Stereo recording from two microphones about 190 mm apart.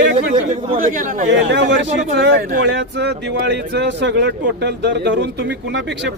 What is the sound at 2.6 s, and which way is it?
Speech, 70° right (ahead or behind).